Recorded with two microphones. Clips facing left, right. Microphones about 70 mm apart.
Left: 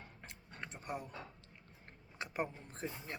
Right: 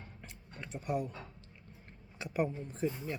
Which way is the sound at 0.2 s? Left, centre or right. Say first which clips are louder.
Left 1 dB; left.